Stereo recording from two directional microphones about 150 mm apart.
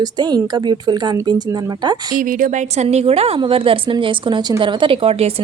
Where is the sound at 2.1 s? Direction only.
65° right (ahead or behind).